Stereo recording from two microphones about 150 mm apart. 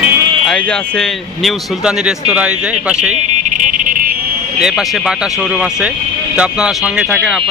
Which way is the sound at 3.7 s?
65° right (ahead or behind).